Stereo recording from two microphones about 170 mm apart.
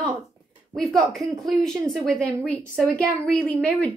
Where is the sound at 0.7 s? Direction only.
Centre (ahead or behind).